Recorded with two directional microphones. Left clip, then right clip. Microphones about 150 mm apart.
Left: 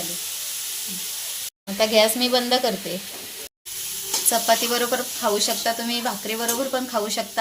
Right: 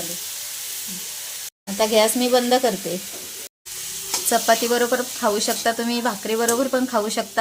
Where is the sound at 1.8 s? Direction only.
45° right (ahead or behind).